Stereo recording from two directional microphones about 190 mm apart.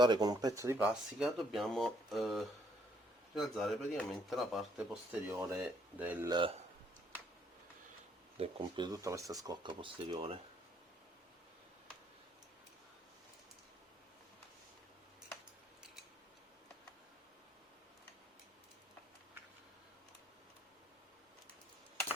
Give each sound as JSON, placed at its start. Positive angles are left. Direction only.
{"t": 0.0, "sound": "speech", "side_deg": -20}
{"t": 8.4, "sound": "speech", "side_deg": -25}